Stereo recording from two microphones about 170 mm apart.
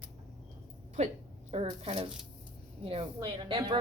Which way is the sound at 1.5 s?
40° right (ahead or behind).